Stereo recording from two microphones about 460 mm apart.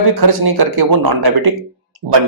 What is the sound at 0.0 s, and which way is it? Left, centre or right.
Speech, right.